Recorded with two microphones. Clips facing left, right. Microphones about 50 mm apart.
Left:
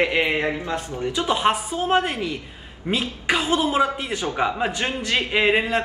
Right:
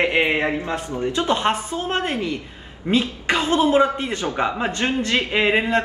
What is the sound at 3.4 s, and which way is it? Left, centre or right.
Speech, right.